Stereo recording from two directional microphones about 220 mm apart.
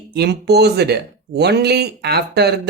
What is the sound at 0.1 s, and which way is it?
Speech, 50° right (ahead or behind).